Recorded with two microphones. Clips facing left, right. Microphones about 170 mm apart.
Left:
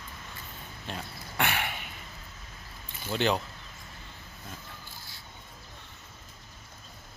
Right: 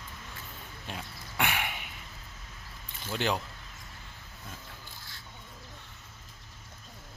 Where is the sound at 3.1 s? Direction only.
10° right (ahead or behind).